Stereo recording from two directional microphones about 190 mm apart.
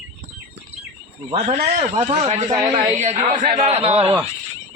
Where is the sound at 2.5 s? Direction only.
20° right (ahead or behind).